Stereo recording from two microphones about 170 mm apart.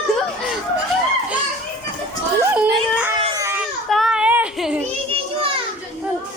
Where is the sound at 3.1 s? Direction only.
20° right (ahead or behind).